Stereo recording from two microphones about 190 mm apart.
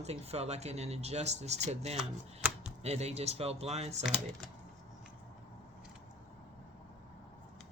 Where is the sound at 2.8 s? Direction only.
35° right (ahead or behind).